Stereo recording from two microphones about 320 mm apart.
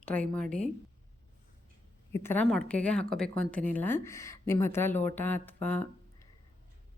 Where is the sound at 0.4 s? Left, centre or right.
Right.